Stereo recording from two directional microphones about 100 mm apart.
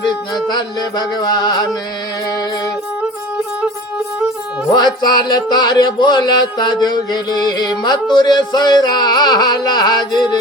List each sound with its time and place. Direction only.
0.0 s music: 45° left (ahead or behind)
4.7 s music: 45° left (ahead or behind)